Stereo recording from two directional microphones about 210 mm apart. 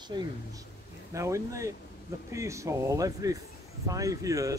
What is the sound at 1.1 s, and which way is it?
Speech, 15° right (ahead or behind).